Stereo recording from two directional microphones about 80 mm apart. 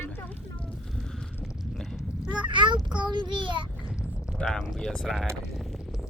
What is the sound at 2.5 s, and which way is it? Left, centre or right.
Child singing, right.